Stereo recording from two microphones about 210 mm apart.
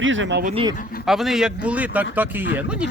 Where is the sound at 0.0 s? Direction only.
65° right (ahead or behind).